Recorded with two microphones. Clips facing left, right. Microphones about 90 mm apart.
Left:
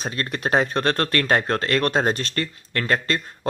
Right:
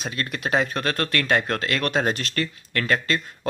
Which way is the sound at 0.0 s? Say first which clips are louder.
Left 2 dB; 40° left (ahead or behind).